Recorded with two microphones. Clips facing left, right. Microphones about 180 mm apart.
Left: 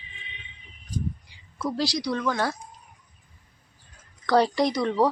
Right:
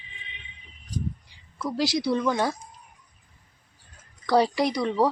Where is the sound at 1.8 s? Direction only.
25° right (ahead or behind).